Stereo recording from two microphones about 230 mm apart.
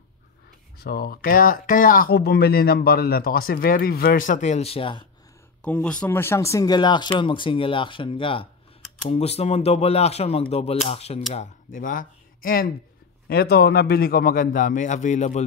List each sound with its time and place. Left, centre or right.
0.7 s speech: left
5.6 s speech: centre; by 12.1 s left
13.3 s speech: left